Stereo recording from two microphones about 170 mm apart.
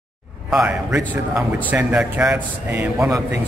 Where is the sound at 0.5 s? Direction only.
5° right (ahead or behind).